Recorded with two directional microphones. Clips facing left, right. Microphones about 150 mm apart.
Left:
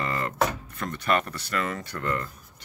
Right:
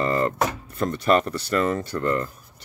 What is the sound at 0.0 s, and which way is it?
Music, 35° right (ahead or behind).